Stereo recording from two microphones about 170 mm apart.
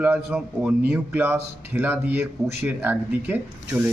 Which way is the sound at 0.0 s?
5° right (ahead or behind).